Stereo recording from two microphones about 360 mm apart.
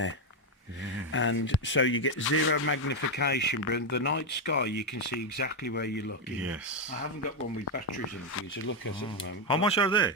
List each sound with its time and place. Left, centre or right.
1.1 s speech: left
4.8 s speech: left
5.4 s speech: left
7.6 s speech: left
9.5 s speech: centre